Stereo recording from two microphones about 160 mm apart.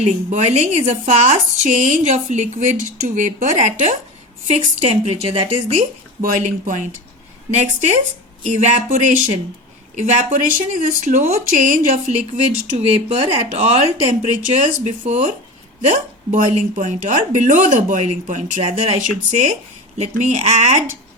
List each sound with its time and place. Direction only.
0.0 s a woman's voice: 50° right (ahead or behind)
6.2 s a woman's voice: 55° right (ahead or behind)
12.7 s a woman's voice: 40° right (ahead or behind)